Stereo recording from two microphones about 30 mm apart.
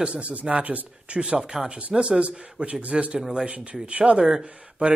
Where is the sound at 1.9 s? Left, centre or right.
Right.